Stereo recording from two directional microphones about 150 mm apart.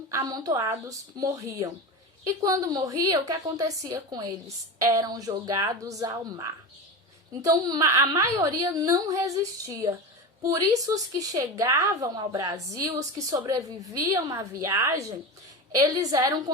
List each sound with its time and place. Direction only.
0.1 s a woman's voice: 25° right (ahead or behind)